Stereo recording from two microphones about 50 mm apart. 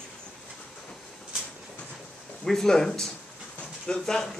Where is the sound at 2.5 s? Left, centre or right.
Centre.